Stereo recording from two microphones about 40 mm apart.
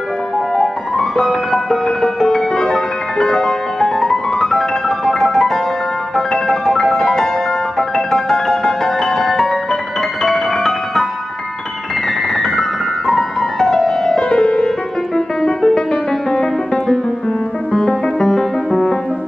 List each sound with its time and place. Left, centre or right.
0.6 s music: centre
12.4 s music: centre
14.1 s music: centre